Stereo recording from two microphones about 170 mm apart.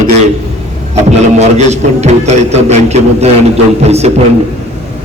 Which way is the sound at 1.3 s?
40° right (ahead or behind).